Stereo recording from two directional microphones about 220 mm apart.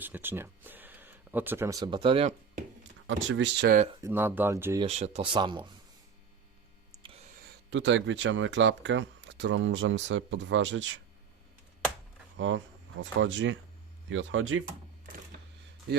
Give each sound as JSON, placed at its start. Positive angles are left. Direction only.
{"t": 0.0, "sound": "speech", "side_deg": -10}
{"t": 3.1, "sound": "speech", "side_deg": -60}
{"t": 4.0, "sound": "speech", "side_deg": -10}
{"t": 4.9, "sound": "speech", "side_deg": -30}
{"t": 7.7, "sound": "speech", "side_deg": -55}
{"t": 12.4, "sound": "speech", "side_deg": -60}